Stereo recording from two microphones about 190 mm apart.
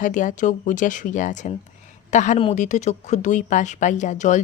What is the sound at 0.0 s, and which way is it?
Speech, 40° left (ahead or behind).